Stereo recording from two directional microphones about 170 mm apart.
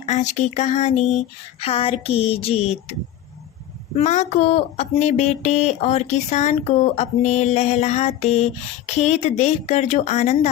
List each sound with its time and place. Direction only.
0.0 s speech: 45° left (ahead or behind)
3.9 s speech: 45° left (ahead or behind)